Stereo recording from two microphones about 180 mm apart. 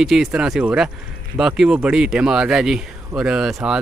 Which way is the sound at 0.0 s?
Centre (ahead or behind).